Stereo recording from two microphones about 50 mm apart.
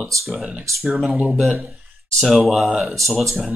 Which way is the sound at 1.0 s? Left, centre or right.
Right.